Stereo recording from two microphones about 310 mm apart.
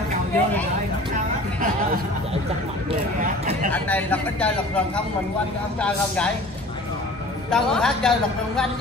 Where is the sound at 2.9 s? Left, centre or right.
Right.